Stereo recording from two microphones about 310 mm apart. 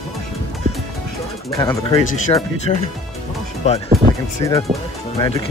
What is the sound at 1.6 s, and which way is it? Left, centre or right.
Speech, centre.